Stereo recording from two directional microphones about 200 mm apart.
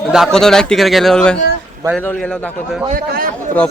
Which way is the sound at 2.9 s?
45° right (ahead or behind).